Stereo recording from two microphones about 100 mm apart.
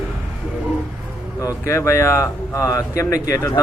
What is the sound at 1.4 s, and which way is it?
Speech, 30° left (ahead or behind).